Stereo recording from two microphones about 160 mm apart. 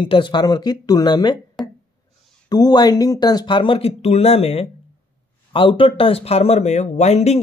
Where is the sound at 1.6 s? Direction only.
Centre (ahead or behind).